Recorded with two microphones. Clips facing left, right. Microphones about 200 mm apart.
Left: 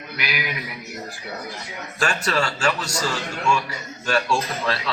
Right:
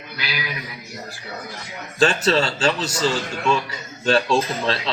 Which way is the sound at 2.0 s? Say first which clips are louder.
Right 5 dB; 25° right (ahead or behind).